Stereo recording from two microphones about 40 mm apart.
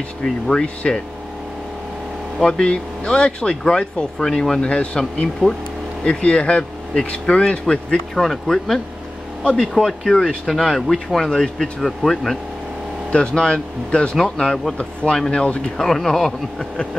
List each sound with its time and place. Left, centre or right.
0.2 s speech: left
2.4 s speech: centre
8.2 s speech: centre
11.2 s speech: centre
13.1 s speech: left